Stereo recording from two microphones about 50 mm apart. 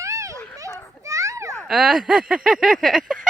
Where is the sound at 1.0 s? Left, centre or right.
Right.